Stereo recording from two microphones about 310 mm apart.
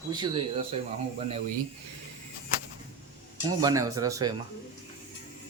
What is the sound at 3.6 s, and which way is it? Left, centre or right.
Speech, centre.